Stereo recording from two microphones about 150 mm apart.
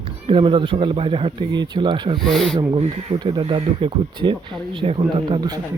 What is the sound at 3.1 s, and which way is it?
Speech, 30° right (ahead or behind).